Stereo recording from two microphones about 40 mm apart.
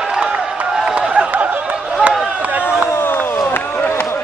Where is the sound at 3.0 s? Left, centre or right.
Left.